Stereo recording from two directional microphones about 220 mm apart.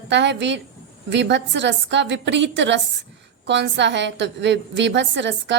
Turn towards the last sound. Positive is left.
turn(degrees=-55)  # may be behind; listen again after turning